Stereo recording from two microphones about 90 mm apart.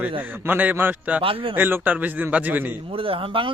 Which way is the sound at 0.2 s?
20° right (ahead or behind).